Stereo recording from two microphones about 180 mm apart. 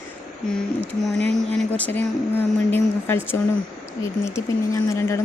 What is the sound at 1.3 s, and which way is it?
A woman's voice, 5° left (ahead or behind).